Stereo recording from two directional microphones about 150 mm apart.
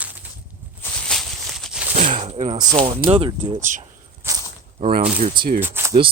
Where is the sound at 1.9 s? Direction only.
50° right (ahead or behind).